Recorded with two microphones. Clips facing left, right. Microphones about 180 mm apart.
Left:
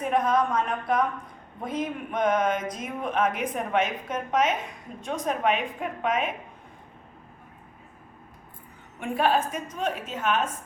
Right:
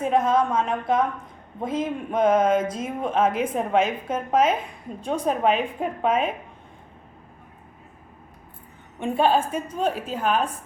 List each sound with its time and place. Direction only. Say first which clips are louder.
0.0 s a woman's voice: right 3 dB; 25° right (ahead or behind)
9.0 s a woman's voice: right 3 dB; 25° right (ahead or behind)